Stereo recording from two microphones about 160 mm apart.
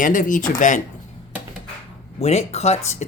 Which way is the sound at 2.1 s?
40° left (ahead or behind).